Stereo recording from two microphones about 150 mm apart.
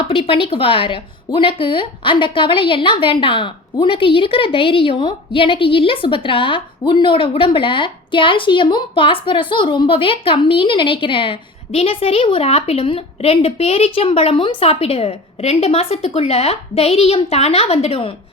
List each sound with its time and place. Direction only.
0.1 s a woman's voice: 40° left (ahead or behind)